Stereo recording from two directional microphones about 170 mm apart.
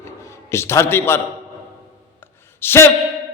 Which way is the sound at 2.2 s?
15° left (ahead or behind).